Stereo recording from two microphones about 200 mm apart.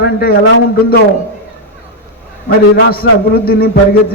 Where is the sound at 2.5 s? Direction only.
50° left (ahead or behind).